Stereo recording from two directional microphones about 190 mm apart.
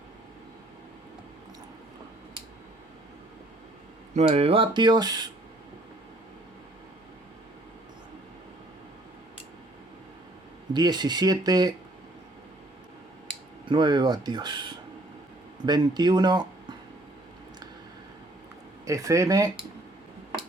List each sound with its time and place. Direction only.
4.1 s speech: 35° right (ahead or behind)
10.8 s speech: 20° right (ahead or behind)
13.7 s speech: 25° right (ahead or behind)
18.9 s speech: 15° right (ahead or behind)